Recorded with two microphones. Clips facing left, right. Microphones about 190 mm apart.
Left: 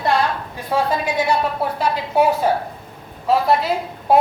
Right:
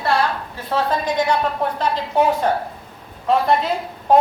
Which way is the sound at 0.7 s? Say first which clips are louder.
Left 1 dB; 10° left (ahead or behind).